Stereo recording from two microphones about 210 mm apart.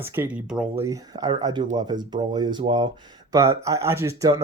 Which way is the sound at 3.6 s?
15° right (ahead or behind).